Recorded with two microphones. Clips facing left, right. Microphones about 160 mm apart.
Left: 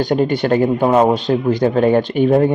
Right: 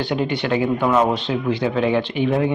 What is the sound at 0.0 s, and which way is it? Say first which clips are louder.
Speech: left 6 dB; 45° left (ahead or behind).